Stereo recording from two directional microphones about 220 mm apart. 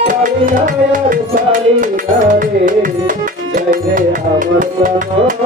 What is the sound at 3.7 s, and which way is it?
Music, 35° right (ahead or behind).